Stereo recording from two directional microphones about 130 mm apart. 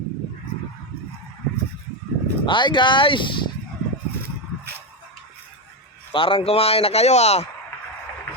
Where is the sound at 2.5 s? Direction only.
35° left (ahead or behind).